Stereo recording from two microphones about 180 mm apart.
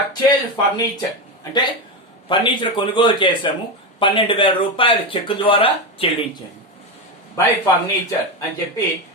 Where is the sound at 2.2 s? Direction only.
25° left (ahead or behind).